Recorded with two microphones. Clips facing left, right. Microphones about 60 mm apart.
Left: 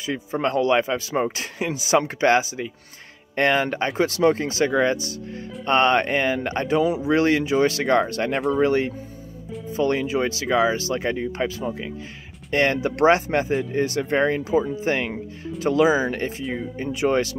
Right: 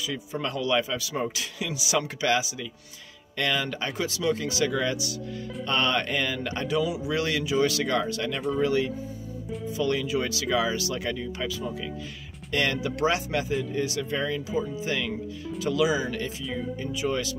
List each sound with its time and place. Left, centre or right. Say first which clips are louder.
0.0 s speech: left 7 dB; left
8.3 s speech: left 6 dB; left
8.5 s speech: left 2 dB; left